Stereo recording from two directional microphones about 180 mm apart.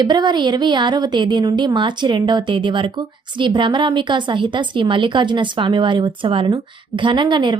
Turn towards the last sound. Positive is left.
turn(degrees=-25)  # may be behind; listen again after turning